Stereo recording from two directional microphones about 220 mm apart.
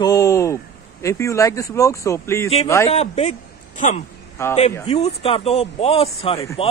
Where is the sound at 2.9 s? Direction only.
30° left (ahead or behind).